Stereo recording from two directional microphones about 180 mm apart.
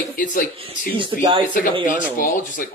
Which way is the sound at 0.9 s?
25° right (ahead or behind).